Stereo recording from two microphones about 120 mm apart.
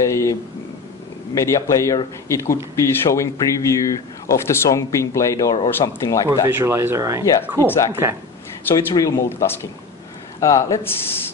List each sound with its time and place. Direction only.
0.0 s a sound: 25° left (ahead or behind)
1.3 s speech: 25° left (ahead or behind)
6.5 s speech: 20° right (ahead or behind)
7.6 s speech: 20° left (ahead or behind)
7.9 s speech: 20° right (ahead or behind)
8.7 s speech: 30° left (ahead or behind)